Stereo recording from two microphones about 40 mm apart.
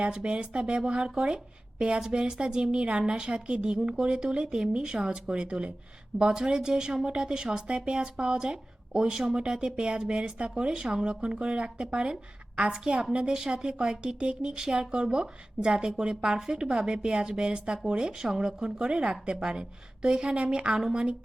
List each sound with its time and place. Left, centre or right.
0.0 s speech: right
13.1 s speech: centre